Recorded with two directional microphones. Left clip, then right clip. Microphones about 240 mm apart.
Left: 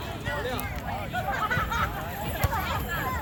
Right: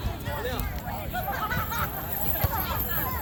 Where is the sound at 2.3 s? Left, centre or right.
Centre.